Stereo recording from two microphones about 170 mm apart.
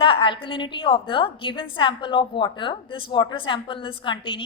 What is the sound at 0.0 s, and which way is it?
A woman's voice, 30° left (ahead or behind).